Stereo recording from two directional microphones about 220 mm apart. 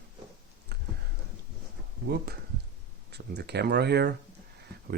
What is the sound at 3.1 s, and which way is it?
Speech, 50° right (ahead or behind).